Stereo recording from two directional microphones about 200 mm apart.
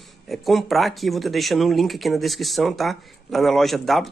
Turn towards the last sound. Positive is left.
turn(degrees=0)  # may be behind; listen again after turning